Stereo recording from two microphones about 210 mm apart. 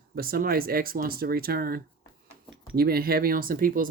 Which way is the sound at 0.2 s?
45° right (ahead or behind).